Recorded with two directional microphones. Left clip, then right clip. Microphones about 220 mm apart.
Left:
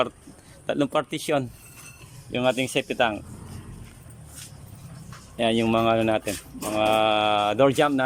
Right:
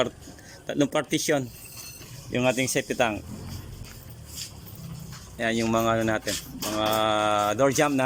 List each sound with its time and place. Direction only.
0.7 s speech: centre (ahead or behind)
5.1 s speech: 5° left (ahead or behind)